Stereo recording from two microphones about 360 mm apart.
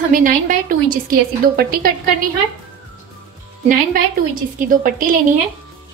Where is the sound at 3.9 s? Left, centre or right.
Right.